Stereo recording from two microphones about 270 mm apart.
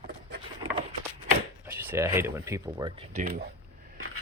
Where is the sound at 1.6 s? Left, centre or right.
Centre.